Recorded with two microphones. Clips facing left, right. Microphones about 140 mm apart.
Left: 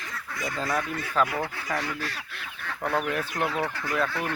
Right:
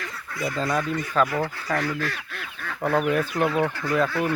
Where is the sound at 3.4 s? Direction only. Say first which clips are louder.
Right 5 dB; 5° right (ahead or behind).